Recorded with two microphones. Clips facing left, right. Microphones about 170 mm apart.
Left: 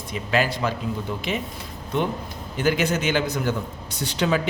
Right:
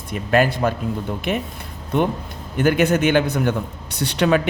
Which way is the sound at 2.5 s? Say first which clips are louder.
Right 5 dB; 55° right (ahead or behind).